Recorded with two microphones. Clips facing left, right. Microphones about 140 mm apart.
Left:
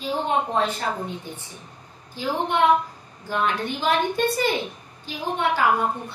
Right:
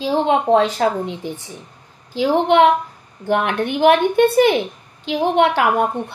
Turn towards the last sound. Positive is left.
turn(degrees=-70)  # may be behind; listen again after turning